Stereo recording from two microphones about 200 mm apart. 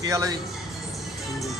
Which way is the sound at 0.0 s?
15° right (ahead or behind).